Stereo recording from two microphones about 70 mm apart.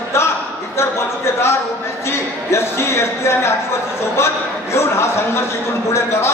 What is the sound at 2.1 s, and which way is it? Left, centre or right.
A man's voice, left.